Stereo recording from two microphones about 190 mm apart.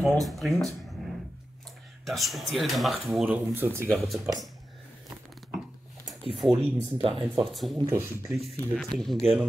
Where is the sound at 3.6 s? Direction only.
10° right (ahead or behind).